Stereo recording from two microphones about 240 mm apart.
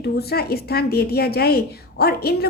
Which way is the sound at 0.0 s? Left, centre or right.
Left.